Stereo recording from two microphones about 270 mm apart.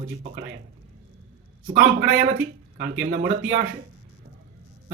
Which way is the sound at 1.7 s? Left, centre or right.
Right.